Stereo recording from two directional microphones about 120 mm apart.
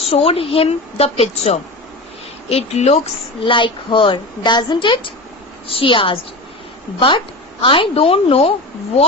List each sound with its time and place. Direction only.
0.0 s a woman's voice: 55° left (ahead or behind)
2.5 s a woman's voice: 60° left (ahead or behind)
3.4 s a woman's voice: 45° left (ahead or behind)
7.6 s speech: 45° left (ahead or behind)